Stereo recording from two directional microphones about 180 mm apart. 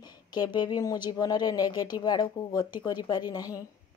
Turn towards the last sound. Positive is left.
turn(degrees=20)  # may be behind; listen again after turning